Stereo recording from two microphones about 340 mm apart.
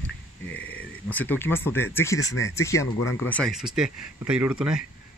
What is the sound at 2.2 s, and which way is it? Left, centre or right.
Speech, left.